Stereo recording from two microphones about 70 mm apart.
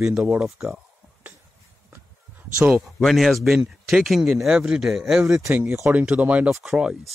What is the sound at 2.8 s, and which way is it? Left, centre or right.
Speech, centre.